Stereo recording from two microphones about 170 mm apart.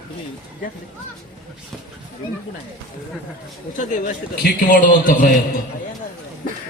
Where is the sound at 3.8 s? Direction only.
50° left (ahead or behind).